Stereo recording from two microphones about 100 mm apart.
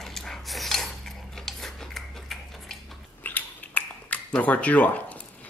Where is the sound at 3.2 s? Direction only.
15° left (ahead or behind).